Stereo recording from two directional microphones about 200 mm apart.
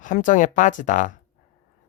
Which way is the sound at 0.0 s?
40° left (ahead or behind).